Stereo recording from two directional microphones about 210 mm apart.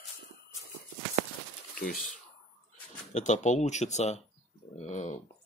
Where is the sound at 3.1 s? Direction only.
35° left (ahead or behind).